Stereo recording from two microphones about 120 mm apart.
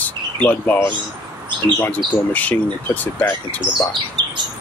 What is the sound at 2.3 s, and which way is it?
Speech, 15° left (ahead or behind).